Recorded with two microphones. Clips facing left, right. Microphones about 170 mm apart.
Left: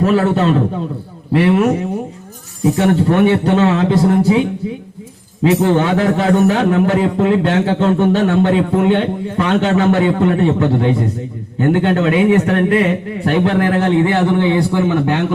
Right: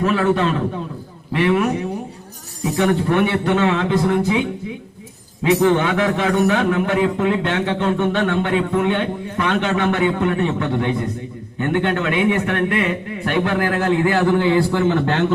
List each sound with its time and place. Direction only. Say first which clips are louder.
0.0 s a man's voice: left 4 dB; 40° left (ahead or behind)
5.6 s a man's voice: left 3 dB; 35° left (ahead or behind); by 15.2 s 10° left (ahead or behind)